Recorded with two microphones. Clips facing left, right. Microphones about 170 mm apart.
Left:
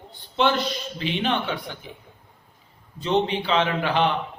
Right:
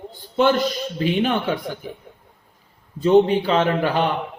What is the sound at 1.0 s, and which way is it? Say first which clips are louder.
Speech: right 5 dB; 45° right (ahead or behind).